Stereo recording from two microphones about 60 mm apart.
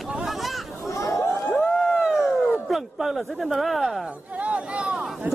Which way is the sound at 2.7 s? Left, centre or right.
Centre.